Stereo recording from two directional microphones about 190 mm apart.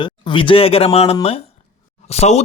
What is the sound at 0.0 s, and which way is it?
Speech, 25° left (ahead or behind).